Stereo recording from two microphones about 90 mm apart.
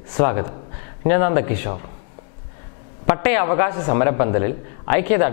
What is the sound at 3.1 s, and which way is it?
A man's voice, 15° left (ahead or behind).